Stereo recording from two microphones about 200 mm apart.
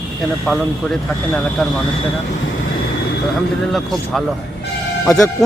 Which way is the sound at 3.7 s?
Centre (ahead or behind).